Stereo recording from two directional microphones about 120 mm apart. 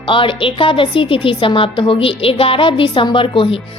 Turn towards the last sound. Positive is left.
turn(degrees=45)  # may be behind; listen again after turning